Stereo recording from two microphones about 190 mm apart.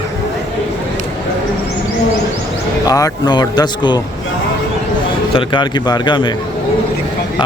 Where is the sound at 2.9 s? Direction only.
20° left (ahead or behind).